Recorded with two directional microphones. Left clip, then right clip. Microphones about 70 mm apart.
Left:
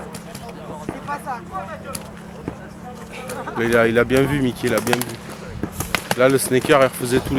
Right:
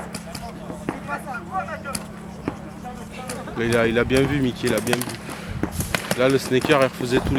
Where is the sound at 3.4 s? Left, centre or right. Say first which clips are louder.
Left 4 dB; left.